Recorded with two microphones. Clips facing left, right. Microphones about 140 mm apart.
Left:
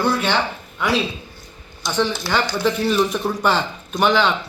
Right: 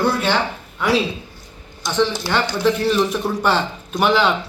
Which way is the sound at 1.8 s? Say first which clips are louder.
Right 2 dB; centre (ahead or behind).